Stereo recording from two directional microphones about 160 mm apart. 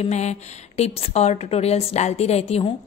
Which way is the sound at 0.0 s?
45° left (ahead or behind).